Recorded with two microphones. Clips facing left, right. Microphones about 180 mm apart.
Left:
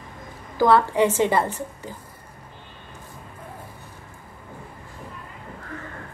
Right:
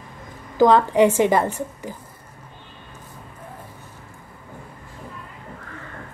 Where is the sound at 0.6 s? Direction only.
15° right (ahead or behind).